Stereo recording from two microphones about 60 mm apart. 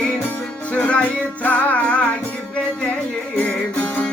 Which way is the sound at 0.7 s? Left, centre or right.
Left.